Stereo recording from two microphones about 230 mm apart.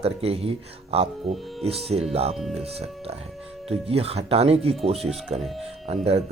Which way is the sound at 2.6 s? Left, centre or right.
Right.